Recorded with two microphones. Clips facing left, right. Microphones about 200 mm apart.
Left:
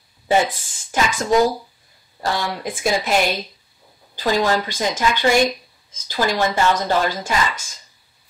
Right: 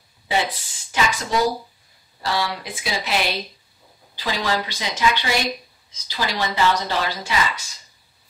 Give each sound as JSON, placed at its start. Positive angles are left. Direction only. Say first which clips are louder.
{"t": 0.3, "sound": "speech", "louder": "left 5 dB", "side_deg": 45}